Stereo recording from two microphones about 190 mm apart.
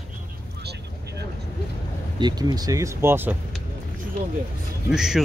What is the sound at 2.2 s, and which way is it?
Speech, 20° right (ahead or behind).